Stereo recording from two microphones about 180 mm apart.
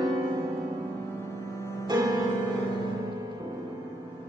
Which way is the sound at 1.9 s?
20° right (ahead or behind).